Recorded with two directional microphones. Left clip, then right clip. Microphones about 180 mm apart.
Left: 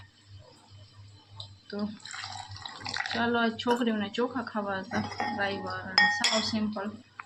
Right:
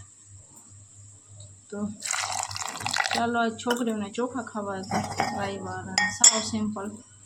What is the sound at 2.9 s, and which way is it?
Drip, 55° right (ahead or behind).